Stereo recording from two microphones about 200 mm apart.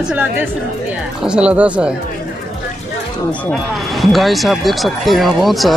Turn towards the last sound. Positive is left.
turn(degrees=0)  # may be behind; listen again after turning